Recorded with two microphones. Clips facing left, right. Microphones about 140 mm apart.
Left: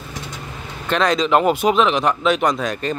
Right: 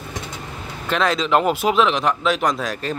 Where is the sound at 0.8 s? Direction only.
5° right (ahead or behind).